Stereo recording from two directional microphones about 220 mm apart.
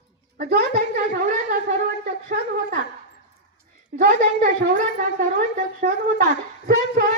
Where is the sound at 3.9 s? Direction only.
40° right (ahead or behind).